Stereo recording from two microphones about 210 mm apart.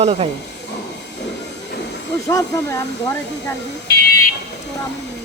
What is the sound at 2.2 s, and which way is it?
Speech, 15° left (ahead or behind).